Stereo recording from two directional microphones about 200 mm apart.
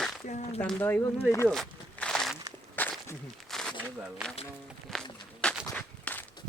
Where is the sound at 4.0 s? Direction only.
5° right (ahead or behind).